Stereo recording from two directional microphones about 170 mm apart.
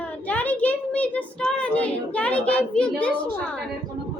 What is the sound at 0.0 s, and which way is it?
A child's voice, 10° left (ahead or behind).